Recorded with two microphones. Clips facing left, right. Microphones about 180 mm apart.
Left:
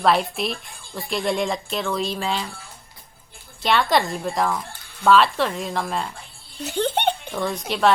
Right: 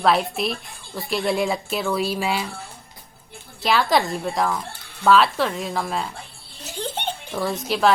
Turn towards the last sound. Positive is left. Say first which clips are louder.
# right 1 dB
turn(degrees=0)  # may be behind; listen again after turning